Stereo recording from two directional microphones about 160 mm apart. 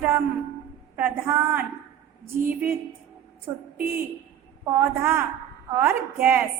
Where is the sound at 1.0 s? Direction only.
15° right (ahead or behind).